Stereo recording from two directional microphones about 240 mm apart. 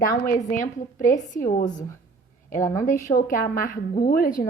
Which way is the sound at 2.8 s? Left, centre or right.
Left.